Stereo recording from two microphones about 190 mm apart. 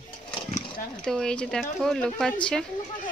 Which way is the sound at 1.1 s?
5° left (ahead or behind).